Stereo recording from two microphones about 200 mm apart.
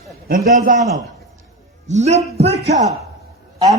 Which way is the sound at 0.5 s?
40° right (ahead or behind).